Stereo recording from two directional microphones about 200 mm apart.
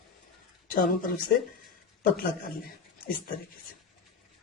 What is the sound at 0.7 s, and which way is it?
Speech, 45° left (ahead or behind).